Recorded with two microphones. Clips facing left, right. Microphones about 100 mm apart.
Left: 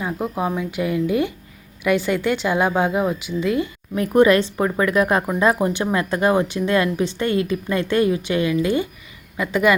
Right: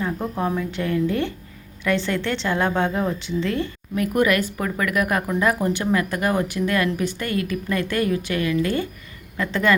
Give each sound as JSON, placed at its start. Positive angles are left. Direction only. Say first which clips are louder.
{"t": 0.0, "sound": "speech", "louder": "left 1 dB", "side_deg": 10}
{"t": 3.9, "sound": "speech", "louder": "left 5 dB", "side_deg": 25}